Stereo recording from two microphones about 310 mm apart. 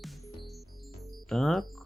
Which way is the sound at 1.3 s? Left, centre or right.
Centre.